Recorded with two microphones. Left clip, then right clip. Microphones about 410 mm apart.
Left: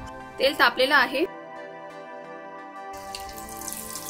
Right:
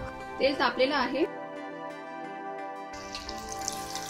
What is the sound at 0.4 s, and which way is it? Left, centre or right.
Speech, left.